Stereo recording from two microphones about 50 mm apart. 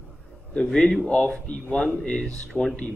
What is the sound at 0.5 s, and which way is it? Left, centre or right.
A man's voice, centre.